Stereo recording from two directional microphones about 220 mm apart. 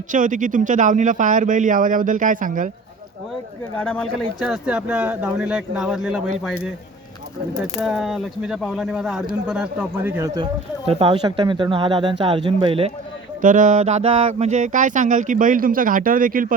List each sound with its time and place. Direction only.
0.1 s speech: 35° right (ahead or behind)
3.8 s speech: 5° left (ahead or behind)
7.6 s speech: centre (ahead or behind); by 12.9 s 25° right (ahead or behind)
13.4 s speech: 35° right (ahead or behind)